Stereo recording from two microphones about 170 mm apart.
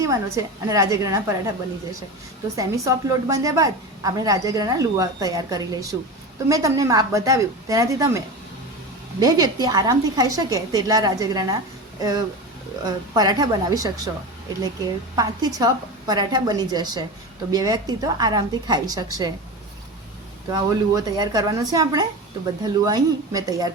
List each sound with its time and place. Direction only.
0.0 s a woman's voice: 20° right (ahead or behind)
2.6 s a woman's voice: 20° right (ahead or behind)
9.2 s a woman's voice: 20° right (ahead or behind)
15.1 s a woman's voice: 20° right (ahead or behind)
20.5 s a woman's voice: 20° right (ahead or behind)